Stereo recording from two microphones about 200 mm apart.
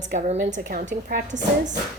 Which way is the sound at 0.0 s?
40° right (ahead or behind).